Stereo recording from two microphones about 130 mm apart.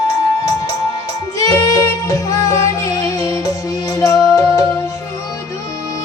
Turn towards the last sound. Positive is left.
turn(degrees=25)  # may be behind; listen again after turning